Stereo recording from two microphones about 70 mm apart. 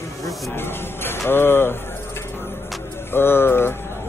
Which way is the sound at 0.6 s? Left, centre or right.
Left.